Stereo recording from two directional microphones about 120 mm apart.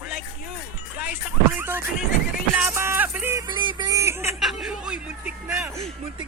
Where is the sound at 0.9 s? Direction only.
15° right (ahead or behind).